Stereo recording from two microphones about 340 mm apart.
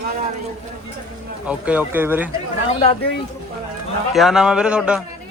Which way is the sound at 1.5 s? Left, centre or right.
Centre.